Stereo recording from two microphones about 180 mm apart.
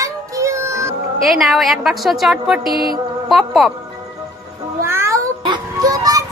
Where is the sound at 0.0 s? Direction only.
15° right (ahead or behind).